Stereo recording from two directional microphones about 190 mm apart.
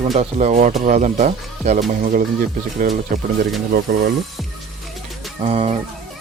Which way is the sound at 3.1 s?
45° right (ahead or behind).